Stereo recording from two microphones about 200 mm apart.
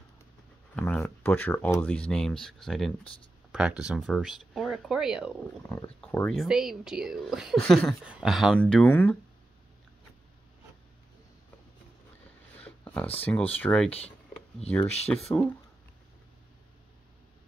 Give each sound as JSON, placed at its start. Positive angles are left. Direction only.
{"t": 0.7, "sound": "speech", "side_deg": 5}
{"t": 12.5, "sound": "a sound", "side_deg": 5}
{"t": 13.2, "sound": "speech", "side_deg": 10}
{"t": 13.8, "sound": "speech", "side_deg": 30}